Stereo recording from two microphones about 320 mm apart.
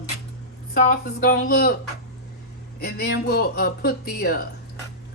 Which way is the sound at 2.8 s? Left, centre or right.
Left.